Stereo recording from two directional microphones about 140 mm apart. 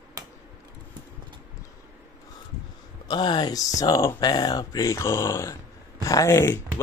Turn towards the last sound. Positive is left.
turn(degrees=20)  # may be behind; listen again after turning